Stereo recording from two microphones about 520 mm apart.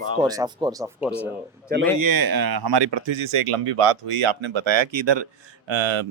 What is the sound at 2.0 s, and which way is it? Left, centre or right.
Speech, right.